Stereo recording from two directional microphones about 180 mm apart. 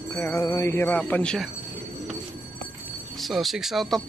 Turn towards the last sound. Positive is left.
turn(degrees=0)  # may be behind; listen again after turning